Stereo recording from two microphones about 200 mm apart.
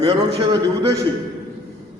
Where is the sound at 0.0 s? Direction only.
25° right (ahead or behind).